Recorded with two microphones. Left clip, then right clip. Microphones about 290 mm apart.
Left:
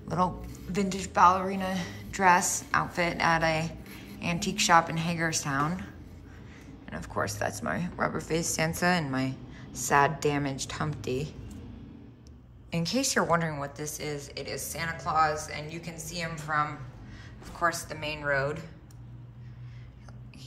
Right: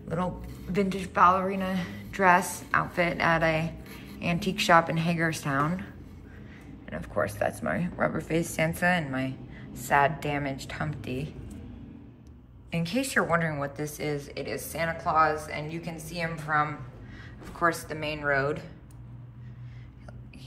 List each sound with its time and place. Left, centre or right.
0.1 s a woman's voice: centre
6.9 s speech: centre
12.7 s a woman's voice: centre